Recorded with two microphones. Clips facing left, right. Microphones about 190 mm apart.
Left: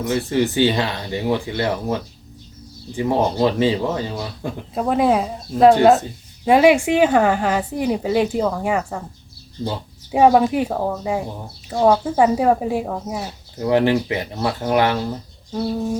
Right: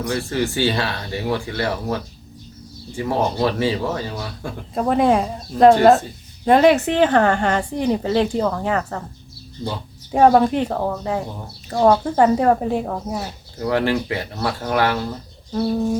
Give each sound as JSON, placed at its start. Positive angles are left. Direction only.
{"t": 0.0, "sound": "speech", "side_deg": 20}
{"t": 4.7, "sound": "speech", "side_deg": 0}
{"t": 10.1, "sound": "speech", "side_deg": 5}
{"t": 13.6, "sound": "speech", "side_deg": 20}